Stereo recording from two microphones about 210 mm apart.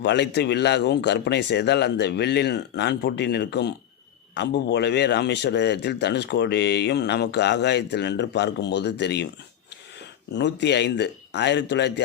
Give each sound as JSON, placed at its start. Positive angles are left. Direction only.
{"t": 0.0, "sound": "speech", "side_deg": 55}
{"t": 10.3, "sound": "speech", "side_deg": 55}